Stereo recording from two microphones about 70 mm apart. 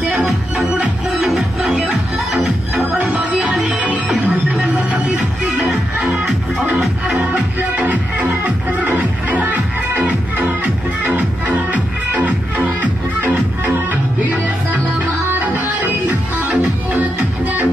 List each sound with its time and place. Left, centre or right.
0.2 s music: centre
1.2 s music: centre
3.0 s music: centre
3.5 s music: centre
3.8 s music: centre
16.1 s music: right